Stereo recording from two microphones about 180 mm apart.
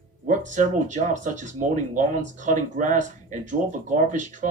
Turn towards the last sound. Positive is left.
turn(degrees=-45)  # may be behind; listen again after turning